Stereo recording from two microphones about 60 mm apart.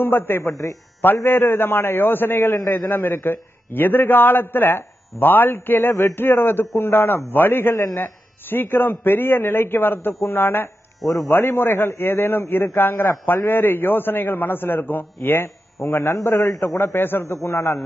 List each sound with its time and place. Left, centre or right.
0.0 s a man's voice: left
15.4 s a man's voice: left